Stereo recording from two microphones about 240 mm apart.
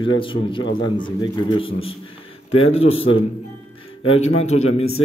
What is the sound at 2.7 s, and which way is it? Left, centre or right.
Speech, left.